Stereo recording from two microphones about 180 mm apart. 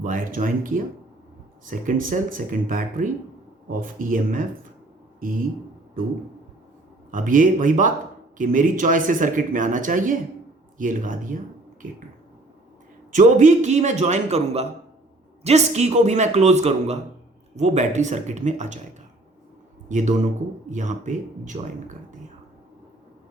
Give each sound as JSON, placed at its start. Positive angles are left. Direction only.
{"t": 0.0, "sound": "a man's voice", "side_deg": -50}
{"t": 7.1, "sound": "a man's voice", "side_deg": -50}
{"t": 13.1, "sound": "a man's voice", "side_deg": -45}
{"t": 19.9, "sound": "a man's voice", "side_deg": -45}